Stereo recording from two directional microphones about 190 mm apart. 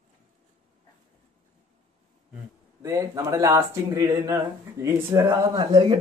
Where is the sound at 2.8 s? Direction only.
15° right (ahead or behind).